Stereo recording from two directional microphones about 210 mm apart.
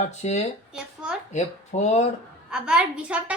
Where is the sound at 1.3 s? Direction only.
35° left (ahead or behind).